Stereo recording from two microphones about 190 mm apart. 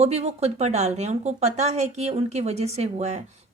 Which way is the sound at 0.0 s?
35° right (ahead or behind).